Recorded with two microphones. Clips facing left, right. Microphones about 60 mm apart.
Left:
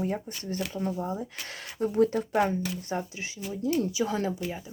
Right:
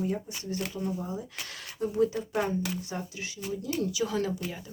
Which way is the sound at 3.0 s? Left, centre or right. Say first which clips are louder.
Left 2 dB; left.